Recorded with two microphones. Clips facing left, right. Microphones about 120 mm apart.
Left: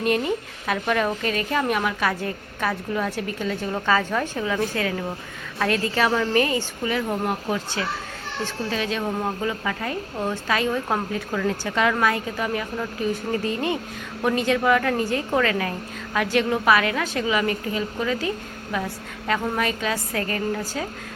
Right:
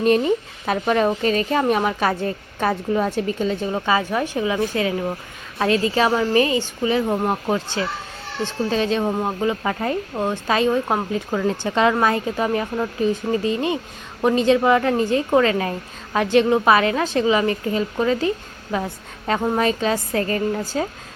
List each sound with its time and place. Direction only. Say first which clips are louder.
0.7 s a woman's voice: right 4 dB; 30° right (ahead or behind)
3.7 s a woman's voice: right 2 dB; 15° right (ahead or behind); by 12.9 s 30° right (ahead or behind)
13.3 s a woman's voice: right 3 dB; 20° right (ahead or behind)